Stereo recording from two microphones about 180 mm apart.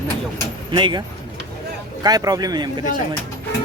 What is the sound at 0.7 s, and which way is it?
Speech, 25° right (ahead or behind).